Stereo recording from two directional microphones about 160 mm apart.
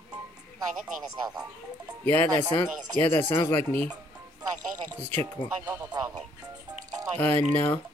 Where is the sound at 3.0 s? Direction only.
15° left (ahead or behind).